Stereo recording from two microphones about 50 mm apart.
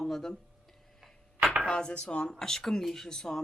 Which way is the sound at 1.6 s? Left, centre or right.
Centre.